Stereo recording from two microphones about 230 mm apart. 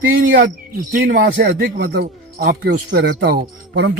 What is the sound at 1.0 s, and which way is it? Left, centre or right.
Speech, right.